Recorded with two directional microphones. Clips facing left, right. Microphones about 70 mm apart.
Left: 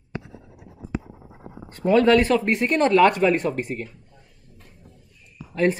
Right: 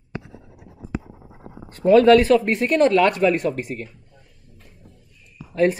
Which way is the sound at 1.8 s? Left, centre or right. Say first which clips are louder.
Right 5 dB; centre.